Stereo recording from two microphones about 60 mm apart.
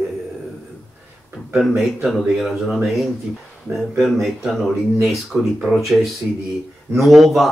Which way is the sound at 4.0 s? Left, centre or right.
Centre.